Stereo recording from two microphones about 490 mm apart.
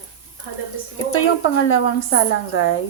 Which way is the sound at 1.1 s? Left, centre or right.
Left.